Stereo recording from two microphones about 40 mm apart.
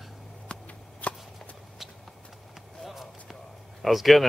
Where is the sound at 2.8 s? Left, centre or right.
Centre.